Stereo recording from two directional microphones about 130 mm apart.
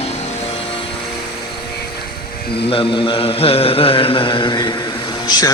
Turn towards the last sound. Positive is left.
turn(degrees=35)  # may be behind; listen again after turning